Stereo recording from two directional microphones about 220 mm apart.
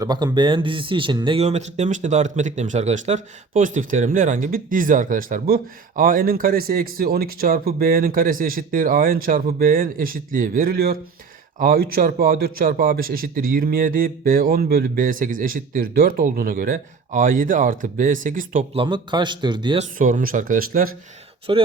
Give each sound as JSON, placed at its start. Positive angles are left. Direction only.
{"t": 0.0, "sound": "speech", "side_deg": -20}
{"t": 18.8, "sound": "a man's voice", "side_deg": -20}
{"t": 20.0, "sound": "speech", "side_deg": -35}
{"t": 21.5, "sound": "a man's voice", "side_deg": -25}